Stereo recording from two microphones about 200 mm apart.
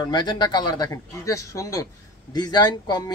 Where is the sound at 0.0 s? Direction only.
20° left (ahead or behind).